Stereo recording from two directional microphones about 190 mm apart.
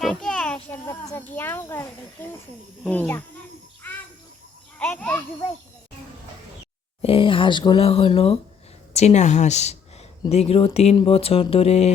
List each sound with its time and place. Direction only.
0.0 s a child's voice: centre (ahead or behind)
3.8 s a sound: 10° left (ahead or behind)
4.8 s a child's voice: 10° left (ahead or behind)
7.0 s speech: 30° left (ahead or behind)